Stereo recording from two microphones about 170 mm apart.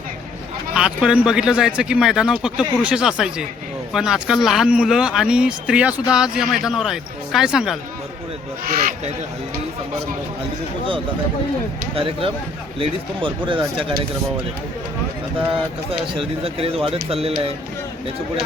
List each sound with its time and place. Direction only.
0.7 s speech: 5° right (ahead or behind)
11.9 s speech: 30° right (ahead or behind)
15.9 s speech: 35° right (ahead or behind)